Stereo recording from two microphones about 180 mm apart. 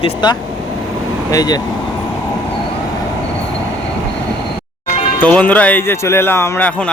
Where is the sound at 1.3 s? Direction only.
20° left (ahead or behind).